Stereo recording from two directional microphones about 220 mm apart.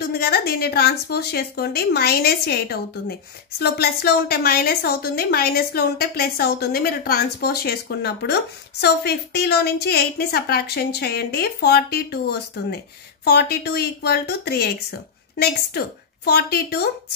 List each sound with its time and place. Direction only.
0.0 s speech: 45° left (ahead or behind)
16.3 s speech: 45° left (ahead or behind)